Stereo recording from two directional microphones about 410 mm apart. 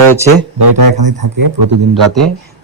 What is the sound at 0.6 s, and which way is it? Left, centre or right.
Speech, right.